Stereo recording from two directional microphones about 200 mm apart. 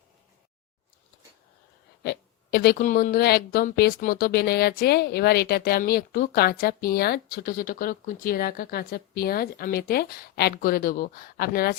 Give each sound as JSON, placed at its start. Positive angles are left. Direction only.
{"t": 2.0, "sound": "a woman's voice", "side_deg": 50}